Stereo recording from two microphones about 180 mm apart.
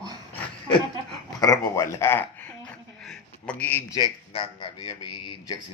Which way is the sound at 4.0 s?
25° left (ahead or behind).